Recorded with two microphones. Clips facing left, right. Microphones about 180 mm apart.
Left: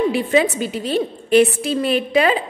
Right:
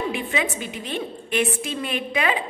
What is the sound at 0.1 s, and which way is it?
A woman's voice, 35° left (ahead or behind).